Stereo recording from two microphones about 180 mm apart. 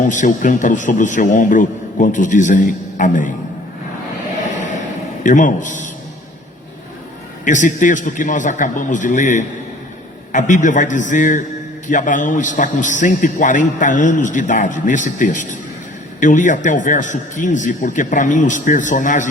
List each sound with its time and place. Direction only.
0.0 s a man's voice: 45° left (ahead or behind)
5.2 s a man's voice: 45° left (ahead or behind)
7.4 s a man's voice: 45° left (ahead or behind)